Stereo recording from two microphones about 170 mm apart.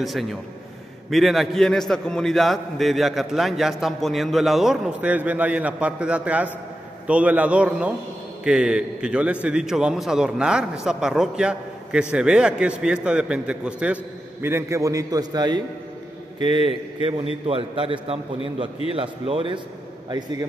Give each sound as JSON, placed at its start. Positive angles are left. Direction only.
{"t": 0.0, "sound": "a man's voice", "side_deg": 0}